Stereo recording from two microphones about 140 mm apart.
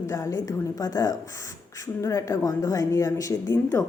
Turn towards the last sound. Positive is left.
turn(degrees=20)  # may be behind; listen again after turning